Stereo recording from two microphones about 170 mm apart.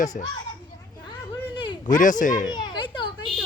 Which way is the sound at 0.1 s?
50° left (ahead or behind).